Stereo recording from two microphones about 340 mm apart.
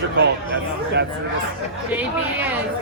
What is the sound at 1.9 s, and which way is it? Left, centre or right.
Speech, centre.